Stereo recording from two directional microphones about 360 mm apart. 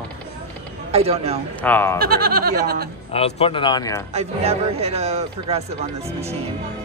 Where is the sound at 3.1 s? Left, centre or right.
Centre.